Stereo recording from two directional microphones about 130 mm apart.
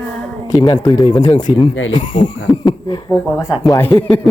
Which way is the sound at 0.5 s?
30° left (ahead or behind).